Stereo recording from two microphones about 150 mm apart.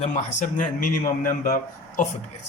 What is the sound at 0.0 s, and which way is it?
Speech, 55° left (ahead or behind).